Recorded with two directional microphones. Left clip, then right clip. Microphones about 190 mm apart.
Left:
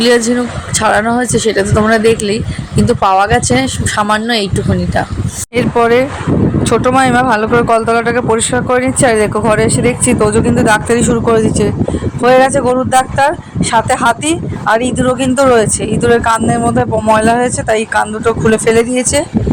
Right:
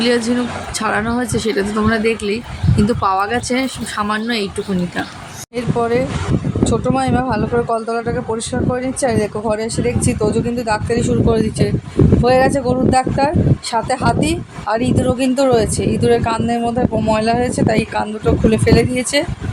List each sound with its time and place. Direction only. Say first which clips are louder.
0.0 s speech: left 6 dB; 25° left (ahead or behind)
5.5 s speech: left 8 dB; 25° left (ahead or behind)